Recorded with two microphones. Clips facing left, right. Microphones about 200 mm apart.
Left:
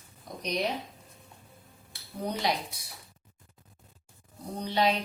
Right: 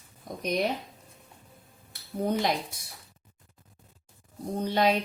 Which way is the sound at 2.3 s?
50° right (ahead or behind).